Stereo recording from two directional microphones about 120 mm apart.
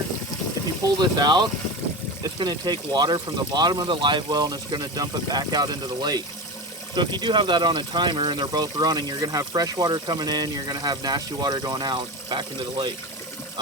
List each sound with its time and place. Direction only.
0.9 s speech: 35° right (ahead or behind)